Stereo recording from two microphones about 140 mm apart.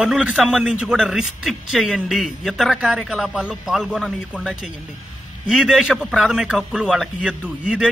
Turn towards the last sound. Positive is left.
turn(degrees=-5)  # may be behind; listen again after turning